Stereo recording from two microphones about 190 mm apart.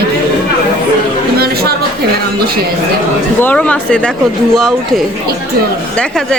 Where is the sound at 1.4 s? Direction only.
55° right (ahead or behind).